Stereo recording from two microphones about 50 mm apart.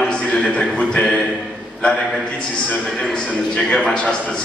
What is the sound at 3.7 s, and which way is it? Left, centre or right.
Speech, centre.